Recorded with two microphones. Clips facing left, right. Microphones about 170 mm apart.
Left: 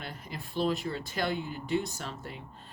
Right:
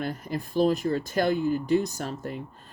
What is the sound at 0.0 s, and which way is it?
Speech, 45° right (ahead or behind).